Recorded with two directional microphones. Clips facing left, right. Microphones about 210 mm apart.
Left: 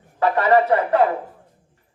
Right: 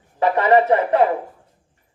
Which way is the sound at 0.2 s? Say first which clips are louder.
Right 1 dB; 20° right (ahead or behind).